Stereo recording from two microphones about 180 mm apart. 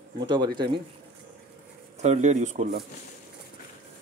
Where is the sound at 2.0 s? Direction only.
40° right (ahead or behind).